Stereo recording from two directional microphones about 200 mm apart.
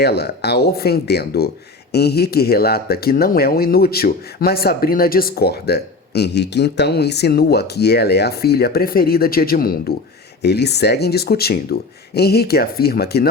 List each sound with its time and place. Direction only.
0.0 s speech: 55° left (ahead or behind)